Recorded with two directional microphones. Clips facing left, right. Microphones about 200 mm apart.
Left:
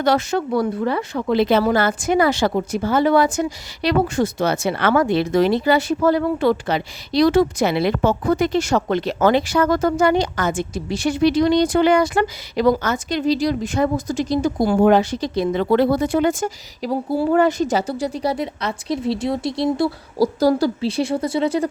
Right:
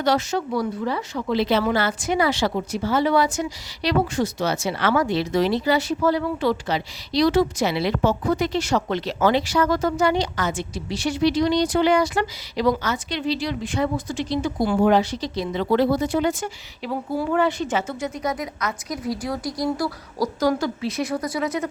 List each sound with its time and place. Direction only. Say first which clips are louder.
0.0 s speech: left 3 dB; 55° left (ahead or behind); by 21.7 s 30° left (ahead or behind)